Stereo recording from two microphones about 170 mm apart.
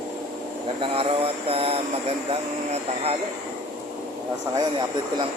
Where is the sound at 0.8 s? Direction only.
35° right (ahead or behind).